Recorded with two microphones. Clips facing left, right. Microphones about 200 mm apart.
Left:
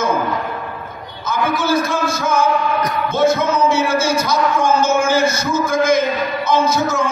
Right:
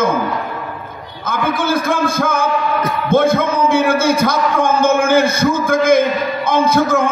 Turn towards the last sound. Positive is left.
turn(degrees=-55)  # may be behind; listen again after turning